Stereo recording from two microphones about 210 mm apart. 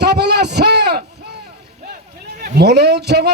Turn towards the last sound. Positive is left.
turn(degrees=-50)  # may be behind; listen again after turning